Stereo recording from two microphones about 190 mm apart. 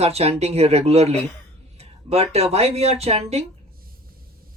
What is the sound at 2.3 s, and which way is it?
Speech, 35° right (ahead or behind).